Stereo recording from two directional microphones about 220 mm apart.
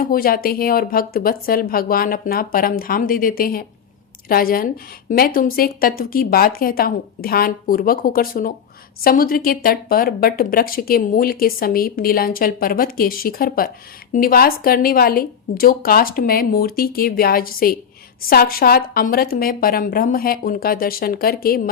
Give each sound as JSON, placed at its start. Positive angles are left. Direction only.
{"t": 0.0, "sound": "speech", "side_deg": 40}